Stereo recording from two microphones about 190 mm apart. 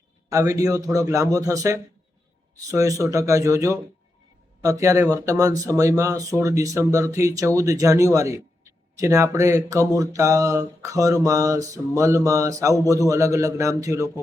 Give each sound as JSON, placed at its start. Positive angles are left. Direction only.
{"t": 0.3, "sound": "speech", "side_deg": -15}